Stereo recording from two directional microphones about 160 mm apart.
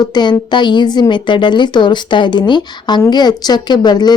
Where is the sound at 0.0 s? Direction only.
25° left (ahead or behind).